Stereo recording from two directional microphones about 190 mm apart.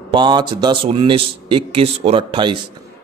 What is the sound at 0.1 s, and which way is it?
A man's voice, 25° right (ahead or behind).